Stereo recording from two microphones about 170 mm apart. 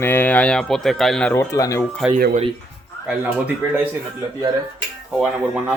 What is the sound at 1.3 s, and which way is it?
Speech, 20° left (ahead or behind).